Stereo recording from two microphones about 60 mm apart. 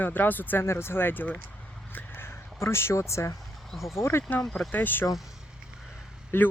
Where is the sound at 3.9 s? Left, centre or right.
Left.